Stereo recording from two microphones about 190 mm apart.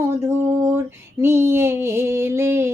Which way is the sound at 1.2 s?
15° right (ahead or behind).